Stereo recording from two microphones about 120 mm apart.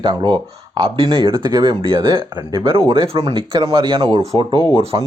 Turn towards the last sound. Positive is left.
turn(degrees=-40)  # may be behind; listen again after turning